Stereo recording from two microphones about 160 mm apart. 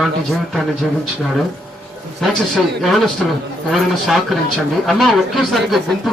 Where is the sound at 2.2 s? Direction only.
Centre (ahead or behind).